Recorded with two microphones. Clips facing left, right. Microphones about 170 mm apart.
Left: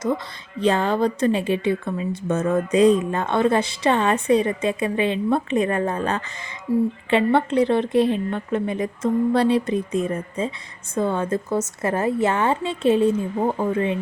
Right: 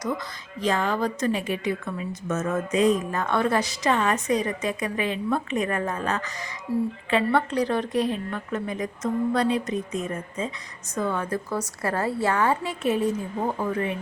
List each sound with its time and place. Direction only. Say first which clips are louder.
0.6 s a woman's voice: left 5 dB; 30° left (ahead or behind)
6.7 s speech: left 5 dB; 15° left (ahead or behind)
7.1 s a woman's voice: left 4 dB; 25° left (ahead or behind)